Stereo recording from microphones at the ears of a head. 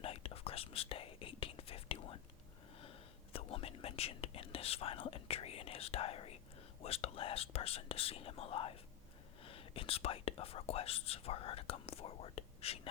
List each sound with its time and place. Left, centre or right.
0.0 s whispering: left
3.3 s whispering: left
6.8 s speech: left